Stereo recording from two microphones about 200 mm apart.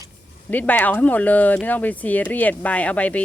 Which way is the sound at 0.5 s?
10° left (ahead or behind).